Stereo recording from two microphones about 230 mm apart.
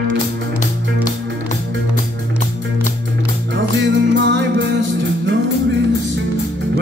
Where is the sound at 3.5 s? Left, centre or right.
Right.